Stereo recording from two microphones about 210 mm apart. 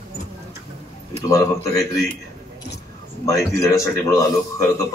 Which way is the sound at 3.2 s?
15° left (ahead or behind).